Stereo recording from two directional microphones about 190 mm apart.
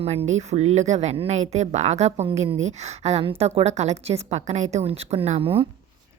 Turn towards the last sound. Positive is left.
turn(degrees=-30)  # may be behind; listen again after turning